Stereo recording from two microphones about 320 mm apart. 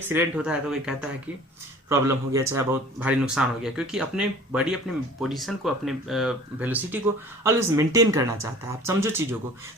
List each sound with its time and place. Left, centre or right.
0.1 s speech: centre